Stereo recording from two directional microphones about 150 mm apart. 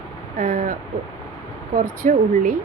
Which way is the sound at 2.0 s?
55° right (ahead or behind).